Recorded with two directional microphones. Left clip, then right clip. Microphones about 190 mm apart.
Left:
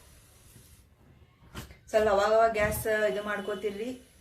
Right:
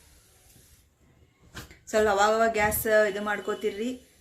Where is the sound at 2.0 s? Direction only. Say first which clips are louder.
Right 1 dB; 40° right (ahead or behind).